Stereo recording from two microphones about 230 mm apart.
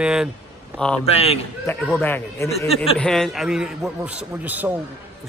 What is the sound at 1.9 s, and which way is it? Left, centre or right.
Speech, centre.